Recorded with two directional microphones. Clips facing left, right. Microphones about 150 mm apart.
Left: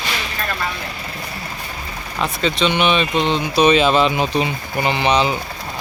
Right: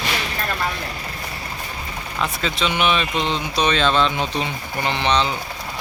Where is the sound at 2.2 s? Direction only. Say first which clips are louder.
Left 4 dB; centre (ahead or behind).